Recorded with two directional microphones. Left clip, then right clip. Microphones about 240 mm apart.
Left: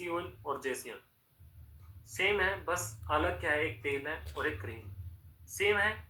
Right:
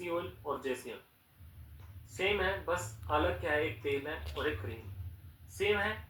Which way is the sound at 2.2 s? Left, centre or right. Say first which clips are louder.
Left 1 dB; left.